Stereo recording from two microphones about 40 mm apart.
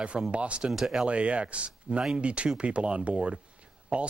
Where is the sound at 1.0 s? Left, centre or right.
Right.